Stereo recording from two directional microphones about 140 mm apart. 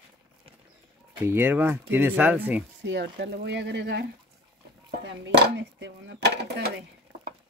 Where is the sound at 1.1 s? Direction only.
15° right (ahead or behind).